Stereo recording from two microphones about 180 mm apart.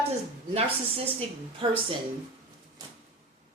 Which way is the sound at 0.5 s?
35° right (ahead or behind).